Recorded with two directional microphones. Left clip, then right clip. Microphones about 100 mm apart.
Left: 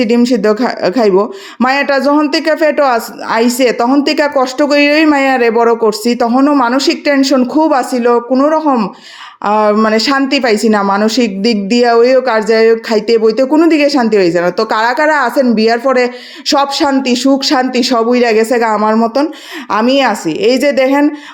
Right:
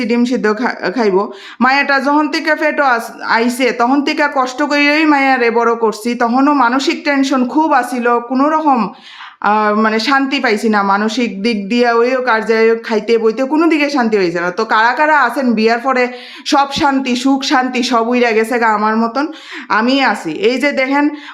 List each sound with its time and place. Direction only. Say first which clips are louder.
0.0 s speech: left 4 dB; 35° left (ahead or behind); by 6.7 s 15° left (ahead or behind)
6.7 s speech: left 3 dB; 30° left (ahead or behind)
9.4 s speech: left 2 dB; 35° left (ahead or behind)
18.8 s speech: left 3 dB; 25° left (ahead or behind)
19.8 s speech: left 5 dB; 35° left (ahead or behind)